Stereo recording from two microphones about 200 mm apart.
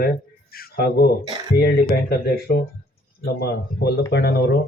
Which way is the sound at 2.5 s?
55° left (ahead or behind).